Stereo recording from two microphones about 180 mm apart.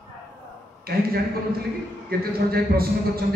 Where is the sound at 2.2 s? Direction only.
55° right (ahead or behind).